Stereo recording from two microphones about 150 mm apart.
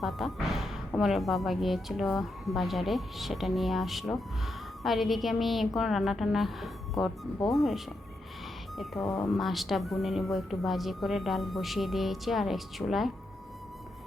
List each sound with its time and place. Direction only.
0.0 s speech: centre (ahead or behind)
9.0 s speech: 20° left (ahead or behind)
9.4 s speech: centre (ahead or behind)